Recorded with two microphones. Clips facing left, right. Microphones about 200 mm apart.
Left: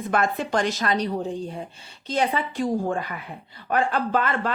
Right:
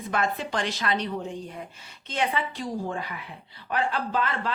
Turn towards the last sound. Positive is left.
turn(degrees=50)  # may be behind; listen again after turning